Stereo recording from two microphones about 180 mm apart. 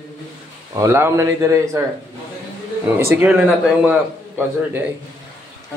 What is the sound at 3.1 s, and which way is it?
Speech, 15° right (ahead or behind).